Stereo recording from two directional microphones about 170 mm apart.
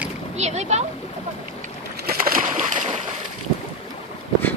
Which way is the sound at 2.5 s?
45° right (ahead or behind).